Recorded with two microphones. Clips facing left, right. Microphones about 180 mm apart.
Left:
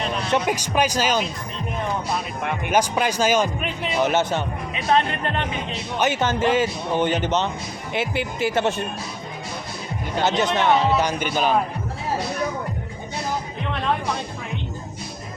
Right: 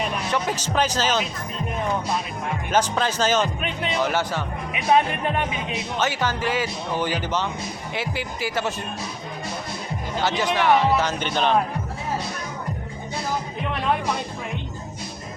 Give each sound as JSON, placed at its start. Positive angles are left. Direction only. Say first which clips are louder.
{"t": 0.3, "sound": "speech", "louder": "left 3 dB", "side_deg": 15}
{"t": 2.6, "sound": "speech", "louder": "left 1 dB", "side_deg": 15}
{"t": 4.0, "sound": "speech", "louder": "left 5 dB", "side_deg": 25}
{"t": 4.7, "sound": "speech", "louder": "right 1 dB", "side_deg": -10}
{"t": 6.0, "sound": "speech", "louder": "left 4 dB", "side_deg": 20}
{"t": 10.2, "sound": "speech", "louder": "left 1 dB", "side_deg": 20}